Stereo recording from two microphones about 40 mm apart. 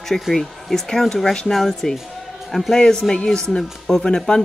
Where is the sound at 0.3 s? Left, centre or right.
Centre.